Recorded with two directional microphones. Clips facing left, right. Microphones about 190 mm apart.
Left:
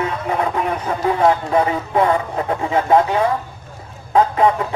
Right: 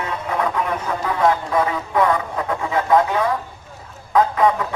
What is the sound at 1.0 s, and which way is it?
Speech, 25° left (ahead or behind).